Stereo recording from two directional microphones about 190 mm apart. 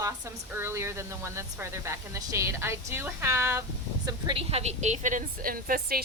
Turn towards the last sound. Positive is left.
turn(degrees=-50)  # may be behind; listen again after turning